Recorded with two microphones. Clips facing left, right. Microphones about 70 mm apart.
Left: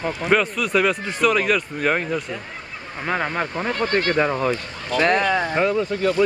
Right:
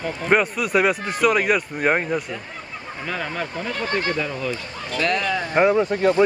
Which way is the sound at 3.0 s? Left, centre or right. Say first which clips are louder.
Left 4 dB; left.